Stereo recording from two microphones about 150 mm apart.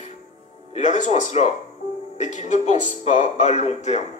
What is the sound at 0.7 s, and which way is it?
Speech, 50° left (ahead or behind).